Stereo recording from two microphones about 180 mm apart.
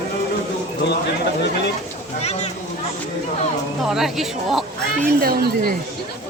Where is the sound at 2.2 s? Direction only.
35° left (ahead or behind).